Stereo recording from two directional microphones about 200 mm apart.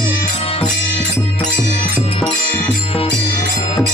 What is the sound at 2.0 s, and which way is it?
Music, 30° left (ahead or behind).